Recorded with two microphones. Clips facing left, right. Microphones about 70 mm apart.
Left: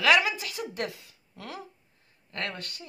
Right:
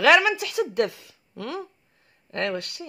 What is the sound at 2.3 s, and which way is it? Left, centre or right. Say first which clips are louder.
Speech: right 8 dB; right.